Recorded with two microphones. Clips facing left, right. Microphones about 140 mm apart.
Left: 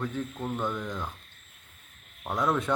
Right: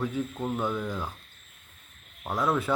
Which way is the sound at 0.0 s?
10° right (ahead or behind).